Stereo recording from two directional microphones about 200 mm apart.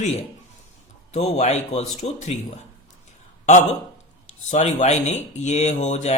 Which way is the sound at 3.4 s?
35° left (ahead or behind).